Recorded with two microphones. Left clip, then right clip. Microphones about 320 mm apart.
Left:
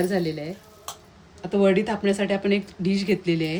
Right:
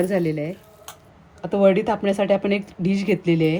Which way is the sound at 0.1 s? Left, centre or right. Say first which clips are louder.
Right 4 dB; centre.